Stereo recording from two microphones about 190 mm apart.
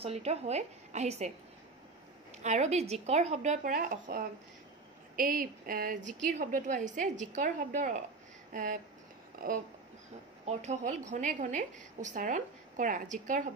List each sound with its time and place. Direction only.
0.0 s a woman's voice: 35° right (ahead or behind)
2.3 s a woman's voice: 40° right (ahead or behind)
10.4 s a woman's voice: 35° right (ahead or behind)